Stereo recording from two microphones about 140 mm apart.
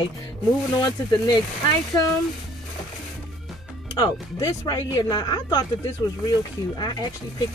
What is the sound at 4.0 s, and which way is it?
Speech, 25° left (ahead or behind).